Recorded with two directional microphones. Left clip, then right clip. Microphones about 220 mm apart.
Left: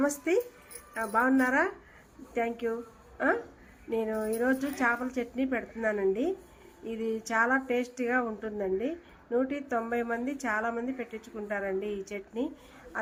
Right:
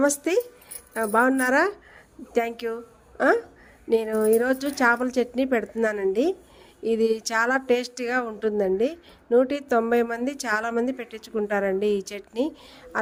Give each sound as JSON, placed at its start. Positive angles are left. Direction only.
{"t": 0.9, "sound": "speech", "side_deg": -45}